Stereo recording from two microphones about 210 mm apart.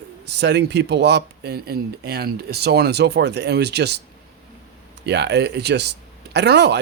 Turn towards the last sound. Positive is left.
turn(degrees=-55)  # may be behind; listen again after turning